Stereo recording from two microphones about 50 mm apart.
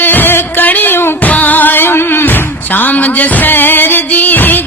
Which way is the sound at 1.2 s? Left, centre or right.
Left.